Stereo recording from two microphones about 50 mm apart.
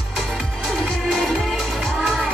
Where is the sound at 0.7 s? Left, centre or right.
Centre.